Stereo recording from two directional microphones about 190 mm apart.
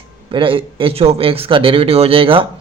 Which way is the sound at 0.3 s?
25° right (ahead or behind).